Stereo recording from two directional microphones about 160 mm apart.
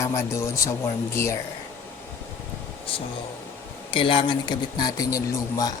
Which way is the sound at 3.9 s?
30° left (ahead or behind).